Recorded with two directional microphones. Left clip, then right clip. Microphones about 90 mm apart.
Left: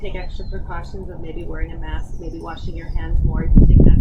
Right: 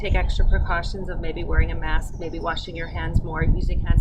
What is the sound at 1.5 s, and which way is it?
A woman's voice, 20° right (ahead or behind).